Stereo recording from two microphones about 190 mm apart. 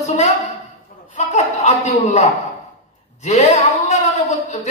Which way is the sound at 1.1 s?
40° left (ahead or behind).